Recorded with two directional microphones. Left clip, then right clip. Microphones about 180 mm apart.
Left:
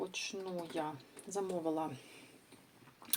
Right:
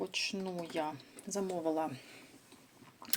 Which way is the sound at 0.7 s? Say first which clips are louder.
Right 3 dB; 25° right (ahead or behind).